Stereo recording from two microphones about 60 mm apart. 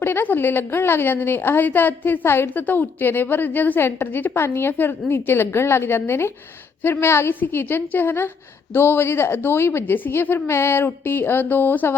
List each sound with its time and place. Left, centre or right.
0.0 s a woman's voice: left